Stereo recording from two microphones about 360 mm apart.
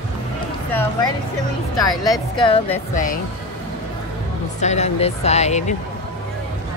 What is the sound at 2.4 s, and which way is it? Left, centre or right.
Speech, centre.